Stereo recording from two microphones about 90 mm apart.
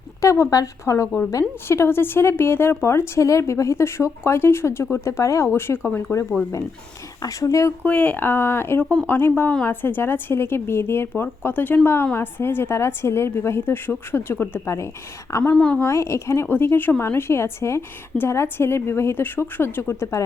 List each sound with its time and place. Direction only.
0.2 s a woman's voice: 35° left (ahead or behind)
6.1 s a woman's voice: 35° left (ahead or behind)
7.9 s speech: 15° left (ahead or behind)
15.5 s speech: 10° left (ahead or behind)
15.8 s speech: 30° left (ahead or behind)